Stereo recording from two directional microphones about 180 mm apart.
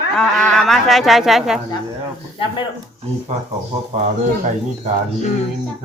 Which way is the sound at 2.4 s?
30° left (ahead or behind).